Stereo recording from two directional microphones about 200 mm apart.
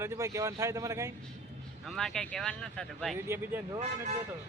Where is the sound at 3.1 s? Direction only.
10° right (ahead or behind).